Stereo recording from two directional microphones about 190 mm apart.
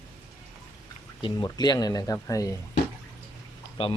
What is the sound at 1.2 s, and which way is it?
Speech, 20° left (ahead or behind).